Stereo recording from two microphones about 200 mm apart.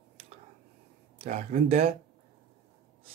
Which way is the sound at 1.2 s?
35° right (ahead or behind).